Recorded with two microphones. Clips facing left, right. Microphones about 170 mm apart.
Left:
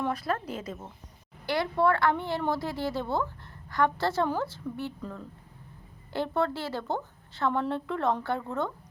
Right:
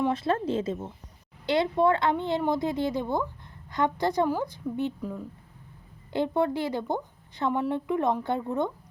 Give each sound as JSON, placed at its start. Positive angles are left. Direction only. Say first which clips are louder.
{"t": 0.0, "sound": "a woman's voice", "louder": "right 5 dB", "side_deg": -25}